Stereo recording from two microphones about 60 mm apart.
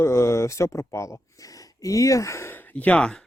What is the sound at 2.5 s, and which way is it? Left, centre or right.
Speech, left.